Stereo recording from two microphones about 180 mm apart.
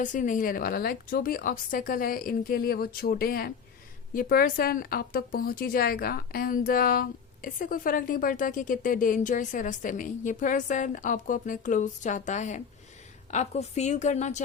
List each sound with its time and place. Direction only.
0.0 s a woman's voice: 45° left (ahead or behind)